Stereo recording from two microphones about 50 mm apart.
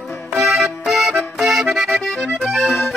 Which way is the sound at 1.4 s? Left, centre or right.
Centre.